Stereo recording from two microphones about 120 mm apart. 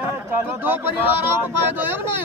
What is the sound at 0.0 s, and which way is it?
Chatter, 20° right (ahead or behind).